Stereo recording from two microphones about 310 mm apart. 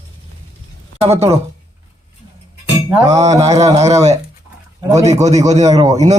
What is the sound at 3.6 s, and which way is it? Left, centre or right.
A man's voice, right.